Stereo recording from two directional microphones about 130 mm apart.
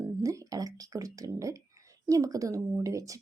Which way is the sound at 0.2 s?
25° right (ahead or behind).